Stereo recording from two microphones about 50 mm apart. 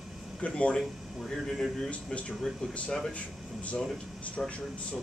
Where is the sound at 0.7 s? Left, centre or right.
Centre.